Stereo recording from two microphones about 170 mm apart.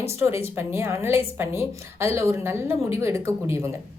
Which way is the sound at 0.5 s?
15° right (ahead or behind).